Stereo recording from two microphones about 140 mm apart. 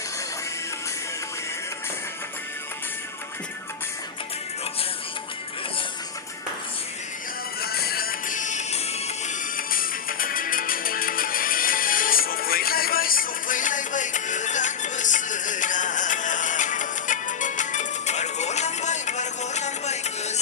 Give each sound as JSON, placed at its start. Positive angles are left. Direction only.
{"t": 7.6, "sound": "music", "side_deg": 90}
{"t": 9.7, "sound": "music", "side_deg": 90}